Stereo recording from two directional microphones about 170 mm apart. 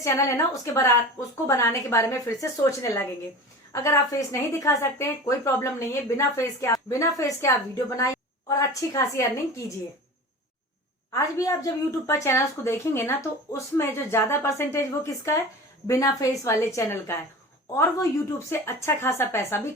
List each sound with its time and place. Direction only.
0.0 s a woman's voice: 20° left (ahead or behind)
11.1 s a woman's voice: 20° left (ahead or behind)
18.3 s a woman's voice: 15° left (ahead or behind)